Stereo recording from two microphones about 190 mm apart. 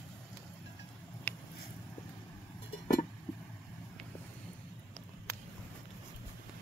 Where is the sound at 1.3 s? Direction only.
10° left (ahead or behind).